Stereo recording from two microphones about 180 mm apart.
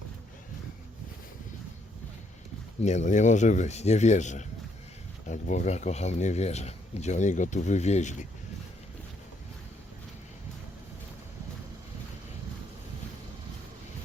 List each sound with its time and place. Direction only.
2.8 s speech: 40° left (ahead or behind)